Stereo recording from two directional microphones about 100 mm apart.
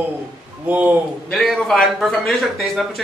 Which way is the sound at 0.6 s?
15° right (ahead or behind).